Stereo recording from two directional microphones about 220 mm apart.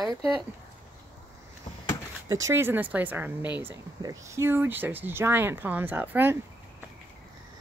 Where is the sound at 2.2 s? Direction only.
15° right (ahead or behind).